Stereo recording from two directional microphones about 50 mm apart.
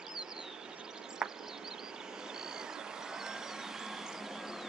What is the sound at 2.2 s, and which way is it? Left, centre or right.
Vehicle, centre.